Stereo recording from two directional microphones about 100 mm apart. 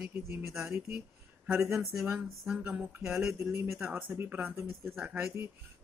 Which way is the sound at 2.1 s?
20° right (ahead or behind).